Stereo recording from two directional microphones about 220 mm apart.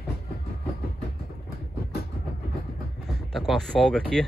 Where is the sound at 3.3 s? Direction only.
Centre (ahead or behind).